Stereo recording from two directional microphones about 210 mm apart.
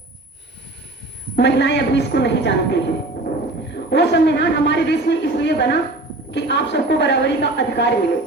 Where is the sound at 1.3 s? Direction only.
55° left (ahead or behind).